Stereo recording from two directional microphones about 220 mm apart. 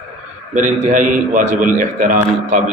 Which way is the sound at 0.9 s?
35° right (ahead or behind).